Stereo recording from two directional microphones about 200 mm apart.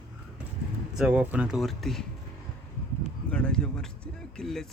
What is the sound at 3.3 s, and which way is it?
Speech, 5° left (ahead or behind).